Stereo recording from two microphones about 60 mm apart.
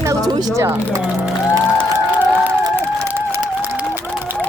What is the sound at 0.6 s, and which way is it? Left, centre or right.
Speech, right.